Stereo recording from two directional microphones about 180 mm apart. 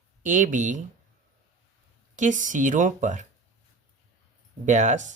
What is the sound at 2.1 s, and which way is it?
Speech, 45° right (ahead or behind).